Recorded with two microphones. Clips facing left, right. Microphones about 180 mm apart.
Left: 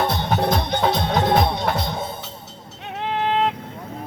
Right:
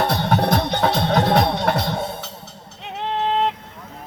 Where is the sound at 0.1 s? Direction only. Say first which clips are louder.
Right 2 dB; 70° right (ahead or behind).